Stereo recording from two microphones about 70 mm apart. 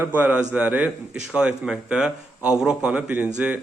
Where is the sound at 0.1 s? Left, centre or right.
Right.